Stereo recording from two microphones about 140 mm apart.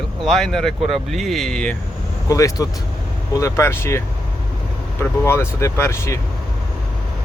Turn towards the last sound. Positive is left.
turn(degrees=20)  # may be behind; listen again after turning